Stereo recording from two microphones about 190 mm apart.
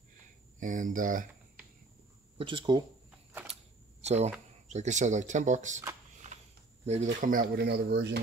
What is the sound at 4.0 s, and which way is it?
Speech, 35° right (ahead or behind).